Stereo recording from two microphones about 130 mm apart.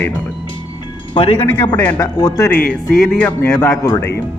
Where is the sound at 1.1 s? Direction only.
50° left (ahead or behind).